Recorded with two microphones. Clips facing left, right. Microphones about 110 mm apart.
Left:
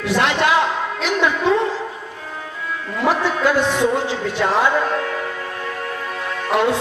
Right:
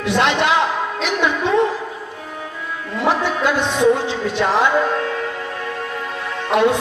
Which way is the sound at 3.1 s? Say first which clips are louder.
Left 1 dB; 20° right (ahead or behind).